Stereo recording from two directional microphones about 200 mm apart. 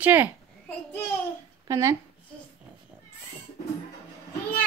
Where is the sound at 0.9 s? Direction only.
10° left (ahead or behind).